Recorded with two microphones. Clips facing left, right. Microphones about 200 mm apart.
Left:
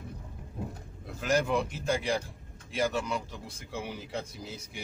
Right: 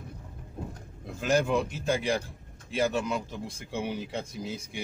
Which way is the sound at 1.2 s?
25° right (ahead or behind).